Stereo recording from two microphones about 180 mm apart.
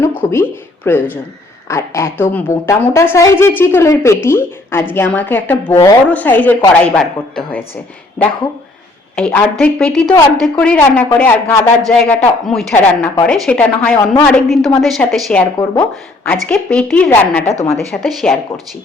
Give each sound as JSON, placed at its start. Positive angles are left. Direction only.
{"t": 0.0, "sound": "a woman's voice", "side_deg": 15}
{"t": 9.1, "sound": "a woman's voice", "side_deg": 5}
{"t": 15.5, "sound": "a woman's voice", "side_deg": 15}
{"t": 17.9, "sound": "speech", "side_deg": 0}